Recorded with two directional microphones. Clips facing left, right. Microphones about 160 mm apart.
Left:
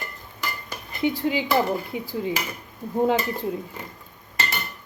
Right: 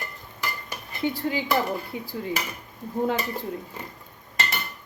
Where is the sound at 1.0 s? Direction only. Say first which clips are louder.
Left 3 dB; 15° left (ahead or behind).